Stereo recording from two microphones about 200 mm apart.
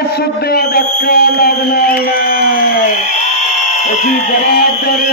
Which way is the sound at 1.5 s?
50° left (ahead or behind).